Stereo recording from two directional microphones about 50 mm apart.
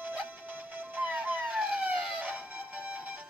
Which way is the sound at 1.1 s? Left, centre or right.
Right.